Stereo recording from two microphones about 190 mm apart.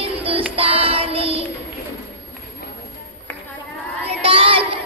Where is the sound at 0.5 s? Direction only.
30° right (ahead or behind).